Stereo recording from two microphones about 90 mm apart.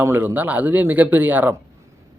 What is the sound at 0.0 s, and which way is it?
Speech, 25° right (ahead or behind).